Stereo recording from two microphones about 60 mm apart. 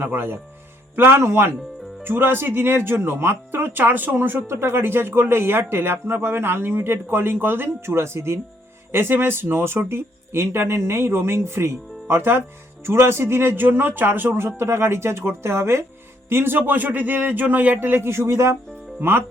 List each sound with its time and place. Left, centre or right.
0.0 s speech: right
18.9 s speech: right